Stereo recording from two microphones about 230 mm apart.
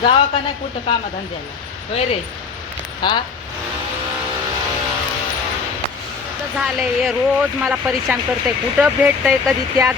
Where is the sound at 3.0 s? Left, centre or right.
Centre.